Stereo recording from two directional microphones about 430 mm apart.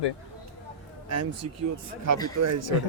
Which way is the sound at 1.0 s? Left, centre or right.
Right.